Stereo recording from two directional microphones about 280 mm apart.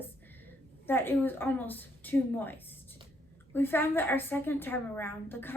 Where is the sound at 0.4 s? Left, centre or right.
Centre.